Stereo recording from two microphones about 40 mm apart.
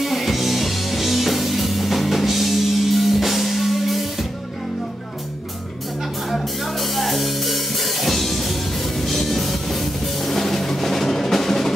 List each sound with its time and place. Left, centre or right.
0.0 s music: centre
6.3 s music: centre